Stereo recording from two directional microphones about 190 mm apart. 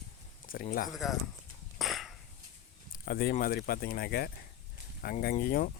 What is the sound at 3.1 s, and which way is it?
Speech, 50° left (ahead or behind).